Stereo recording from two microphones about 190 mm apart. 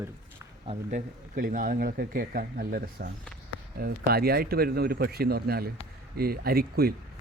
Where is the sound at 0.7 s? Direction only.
40° right (ahead or behind).